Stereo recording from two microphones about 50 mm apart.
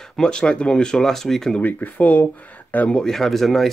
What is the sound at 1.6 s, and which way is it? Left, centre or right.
Speech, left.